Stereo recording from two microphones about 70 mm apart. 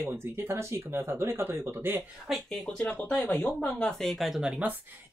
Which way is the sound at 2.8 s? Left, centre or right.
Left.